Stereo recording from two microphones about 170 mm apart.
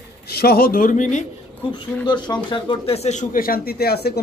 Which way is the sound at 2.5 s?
40° left (ahead or behind).